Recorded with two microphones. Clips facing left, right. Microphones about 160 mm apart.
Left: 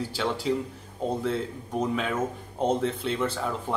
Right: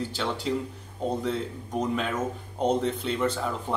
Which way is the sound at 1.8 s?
5° left (ahead or behind).